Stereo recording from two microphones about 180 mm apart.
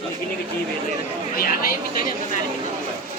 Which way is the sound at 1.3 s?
55° left (ahead or behind).